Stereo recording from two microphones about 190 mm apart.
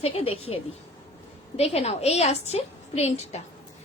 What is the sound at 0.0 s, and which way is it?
A woman's voice, 30° left (ahead or behind).